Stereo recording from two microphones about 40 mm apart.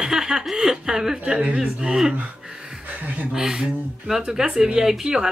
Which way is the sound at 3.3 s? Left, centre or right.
Centre.